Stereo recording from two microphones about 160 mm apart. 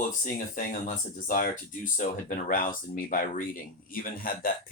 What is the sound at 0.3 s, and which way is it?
Speech, 55° left (ahead or behind).